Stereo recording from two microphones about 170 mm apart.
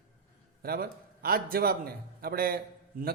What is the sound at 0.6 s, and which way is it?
A man's voice, 60° right (ahead or behind).